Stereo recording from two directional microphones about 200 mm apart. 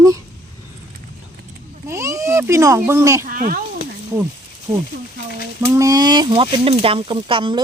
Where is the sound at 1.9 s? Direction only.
15° right (ahead or behind).